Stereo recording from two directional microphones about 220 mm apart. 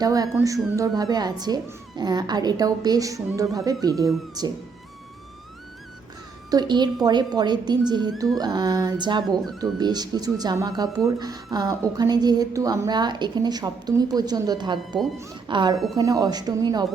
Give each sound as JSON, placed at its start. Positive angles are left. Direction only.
{"t": 0.0, "sound": "speech", "side_deg": -15}
{"t": 6.5, "sound": "speech", "side_deg": -20}